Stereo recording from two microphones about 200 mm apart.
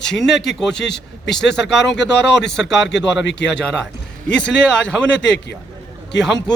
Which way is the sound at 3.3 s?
60° left (ahead or behind).